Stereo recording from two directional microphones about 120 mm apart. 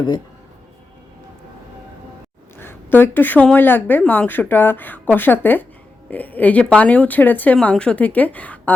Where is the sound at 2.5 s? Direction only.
20° left (ahead or behind).